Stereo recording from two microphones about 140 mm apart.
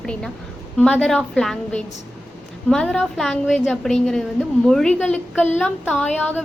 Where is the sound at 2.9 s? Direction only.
Centre (ahead or behind).